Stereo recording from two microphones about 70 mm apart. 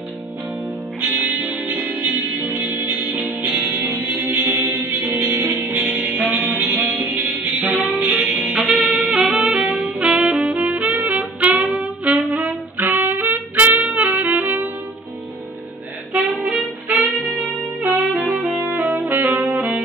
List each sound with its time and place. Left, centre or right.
1.1 s music: right
9.3 s saxophone: centre
16.1 s saxophone: right
18.3 s saxophone: right